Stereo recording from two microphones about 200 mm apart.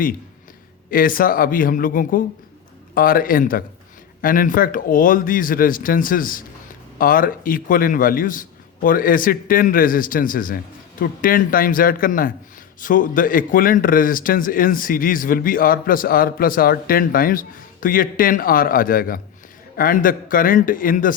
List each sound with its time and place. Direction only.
0.9 s speech: 45° left (ahead or behind)